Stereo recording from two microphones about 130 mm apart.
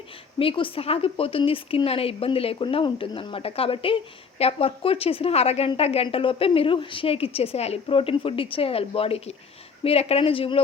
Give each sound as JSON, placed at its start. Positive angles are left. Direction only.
{"t": 0.3, "sound": "speech", "side_deg": 45}